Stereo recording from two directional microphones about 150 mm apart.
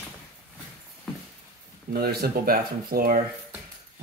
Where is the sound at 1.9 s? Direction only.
90° right; by 3.2 s 70° right (ahead or behind).